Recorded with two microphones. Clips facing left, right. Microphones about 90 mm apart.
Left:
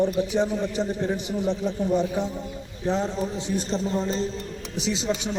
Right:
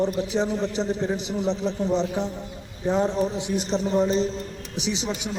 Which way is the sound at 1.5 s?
25° right (ahead or behind).